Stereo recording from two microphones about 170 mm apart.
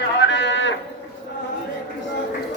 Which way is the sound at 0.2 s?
90° left.